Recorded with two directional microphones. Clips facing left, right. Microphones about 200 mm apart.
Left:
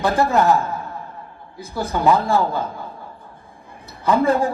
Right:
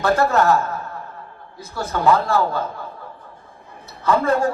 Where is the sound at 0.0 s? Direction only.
15° left (ahead or behind).